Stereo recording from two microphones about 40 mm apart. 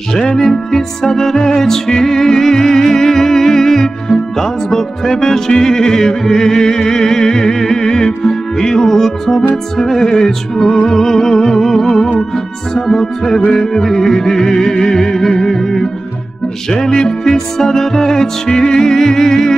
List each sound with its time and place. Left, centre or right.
0.4 s music: centre
16.9 s music: left
17.3 s music: centre